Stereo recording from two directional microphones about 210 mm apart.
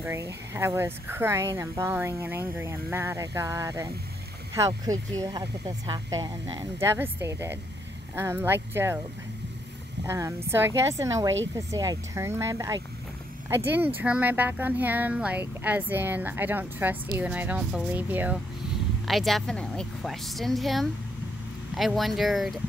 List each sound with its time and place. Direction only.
0.0 s speech: 10° right (ahead or behind)
10.0 s speech: 15° right (ahead or behind)